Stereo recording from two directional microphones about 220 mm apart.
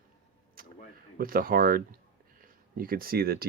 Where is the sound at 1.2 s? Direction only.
40° right (ahead or behind).